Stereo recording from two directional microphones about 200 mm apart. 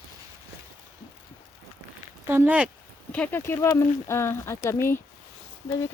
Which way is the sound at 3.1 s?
10° left (ahead or behind).